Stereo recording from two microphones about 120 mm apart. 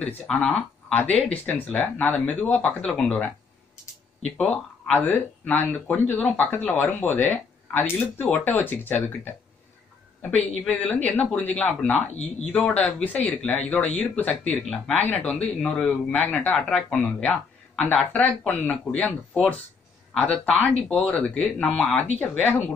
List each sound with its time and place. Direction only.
0.3 s speech: 10° left (ahead or behind)
10.3 s speech: 10° left (ahead or behind)
14.6 s speech: centre (ahead or behind)
15.0 s speech: 10° left (ahead or behind)